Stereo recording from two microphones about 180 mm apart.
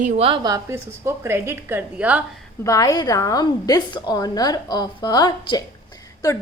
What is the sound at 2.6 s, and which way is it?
A woman's voice, 20° left (ahead or behind).